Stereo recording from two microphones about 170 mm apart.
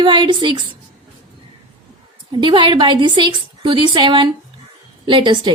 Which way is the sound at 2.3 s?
30° right (ahead or behind).